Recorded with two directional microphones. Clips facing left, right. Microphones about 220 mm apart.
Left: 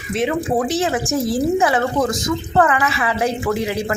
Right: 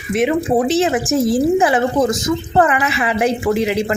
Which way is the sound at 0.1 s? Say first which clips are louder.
Right 4 dB; 20° right (ahead or behind).